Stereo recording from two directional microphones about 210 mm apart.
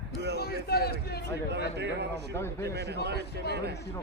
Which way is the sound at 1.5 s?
55° right (ahead or behind).